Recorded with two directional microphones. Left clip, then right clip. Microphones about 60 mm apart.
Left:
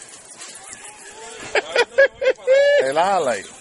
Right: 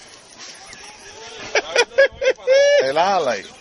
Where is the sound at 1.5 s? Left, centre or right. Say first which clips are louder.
Right 1 dB; centre.